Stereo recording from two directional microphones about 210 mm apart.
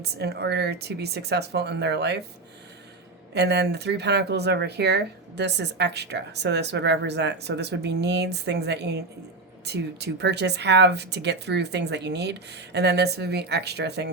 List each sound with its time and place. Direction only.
0.0 s speech: 50° right (ahead or behind)
3.3 s speech: 55° right (ahead or behind)